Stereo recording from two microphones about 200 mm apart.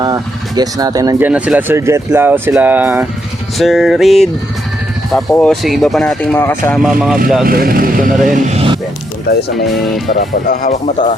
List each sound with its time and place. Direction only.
0.0 s speech: 20° right (ahead or behind)
1.3 s speech: 5° right (ahead or behind)
5.3 s speech: 5° left (ahead or behind)
6.7 s speech: centre (ahead or behind)
7.4 s speech: 45° right (ahead or behind)
8.3 s a sound: 35° right (ahead or behind)
9.3 s speech: 50° left (ahead or behind)
9.6 s speech: centre (ahead or behind)
10.2 s speech: 45° left (ahead or behind); by 11.2 s 30° left (ahead or behind)